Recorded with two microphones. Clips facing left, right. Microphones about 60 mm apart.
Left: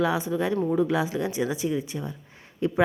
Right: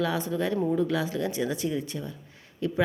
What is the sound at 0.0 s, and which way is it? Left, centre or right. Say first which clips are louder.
Speech: left 3 dB; centre.